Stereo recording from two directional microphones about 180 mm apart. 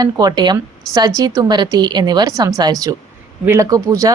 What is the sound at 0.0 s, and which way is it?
Speech, 20° right (ahead or behind).